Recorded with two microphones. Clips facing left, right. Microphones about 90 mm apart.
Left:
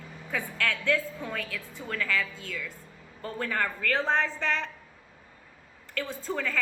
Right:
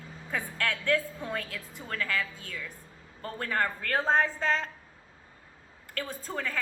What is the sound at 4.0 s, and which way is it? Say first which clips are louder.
Speech: right 2 dB; 20° right (ahead or behind).